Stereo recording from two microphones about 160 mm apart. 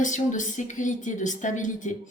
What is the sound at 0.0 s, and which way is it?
A woman's voice, 50° left (ahead or behind).